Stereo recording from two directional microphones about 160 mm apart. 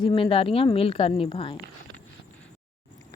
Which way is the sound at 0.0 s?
30° left (ahead or behind).